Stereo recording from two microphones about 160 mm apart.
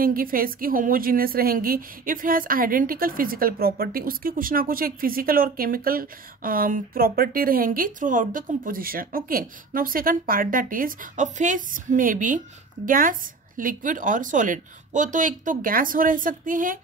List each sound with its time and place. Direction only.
0.0 s a woman's voice: 65° right (ahead or behind)